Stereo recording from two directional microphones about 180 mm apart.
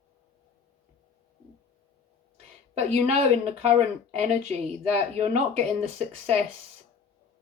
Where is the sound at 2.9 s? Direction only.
35° right (ahead or behind).